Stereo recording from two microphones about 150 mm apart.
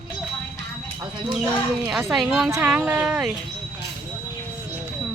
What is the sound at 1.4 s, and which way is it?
Speech, 5° right (ahead or behind).